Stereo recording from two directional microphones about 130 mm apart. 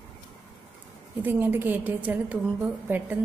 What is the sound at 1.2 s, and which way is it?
A woman's voice, 15° right (ahead or behind).